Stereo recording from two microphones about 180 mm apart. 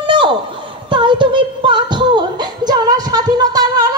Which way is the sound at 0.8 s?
25° right (ahead or behind).